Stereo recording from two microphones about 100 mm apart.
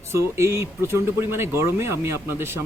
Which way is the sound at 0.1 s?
25° right (ahead or behind).